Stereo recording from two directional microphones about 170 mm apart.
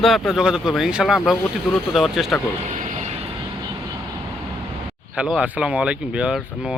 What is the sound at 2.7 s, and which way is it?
Vehicle, 45° right (ahead or behind).